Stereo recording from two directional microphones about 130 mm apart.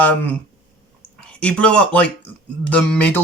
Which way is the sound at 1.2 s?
10° left (ahead or behind).